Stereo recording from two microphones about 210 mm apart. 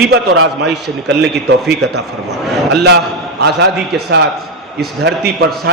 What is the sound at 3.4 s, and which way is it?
A man's voice, 50° right (ahead or behind).